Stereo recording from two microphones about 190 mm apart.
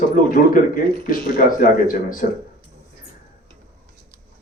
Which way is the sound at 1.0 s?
45° left (ahead or behind).